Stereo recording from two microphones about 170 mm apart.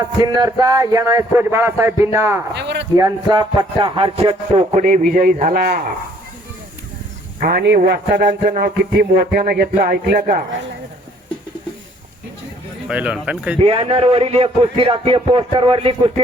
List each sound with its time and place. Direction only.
0.0 s speech: 20° right (ahead or behind)
2.6 s speech: 90° right
2.9 s speech: 20° right (ahead or behind); by 5.6 s 55° right (ahead or behind)
7.3 s a man's voice: 60° right (ahead or behind); by 8.4 s 90° right
8.4 s music: 60° right (ahead or behind)
12.9 s speech: 5° right (ahead or behind)
13.6 s speech: 35° right (ahead or behind)